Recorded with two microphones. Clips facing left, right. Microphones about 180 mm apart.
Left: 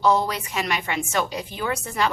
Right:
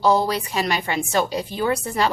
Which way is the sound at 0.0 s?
35° right (ahead or behind).